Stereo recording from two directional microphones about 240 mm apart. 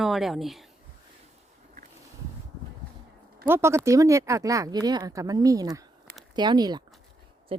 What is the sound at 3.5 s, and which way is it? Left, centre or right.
Speech, centre.